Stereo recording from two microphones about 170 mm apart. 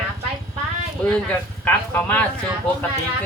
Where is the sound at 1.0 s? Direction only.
10° left (ahead or behind).